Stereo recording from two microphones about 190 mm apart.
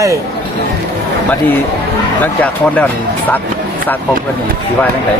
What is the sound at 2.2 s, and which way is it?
Speech, 10° left (ahead or behind).